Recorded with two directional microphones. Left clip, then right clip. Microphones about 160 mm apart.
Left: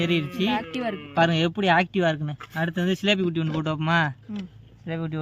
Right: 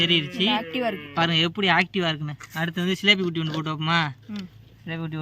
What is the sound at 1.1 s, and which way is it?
Speech, 50° left (ahead or behind).